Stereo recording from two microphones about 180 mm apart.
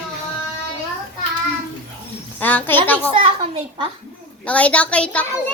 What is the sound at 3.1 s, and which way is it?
Speech, 30° right (ahead or behind).